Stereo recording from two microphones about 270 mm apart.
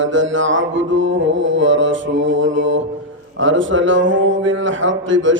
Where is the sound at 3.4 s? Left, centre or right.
Right.